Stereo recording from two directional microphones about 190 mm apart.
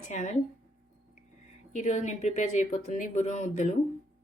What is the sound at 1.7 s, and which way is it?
Speech, 40° left (ahead or behind).